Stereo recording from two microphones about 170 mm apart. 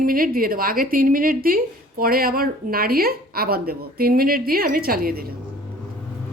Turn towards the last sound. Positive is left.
turn(degrees=-60)  # may be behind; listen again after turning